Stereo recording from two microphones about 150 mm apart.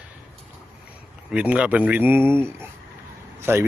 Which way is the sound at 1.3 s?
10° right (ahead or behind).